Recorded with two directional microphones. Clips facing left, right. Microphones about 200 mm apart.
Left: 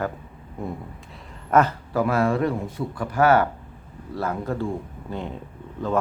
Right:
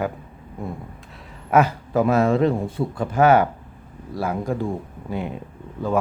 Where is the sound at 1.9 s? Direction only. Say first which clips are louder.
Right 4 dB; 20° right (ahead or behind).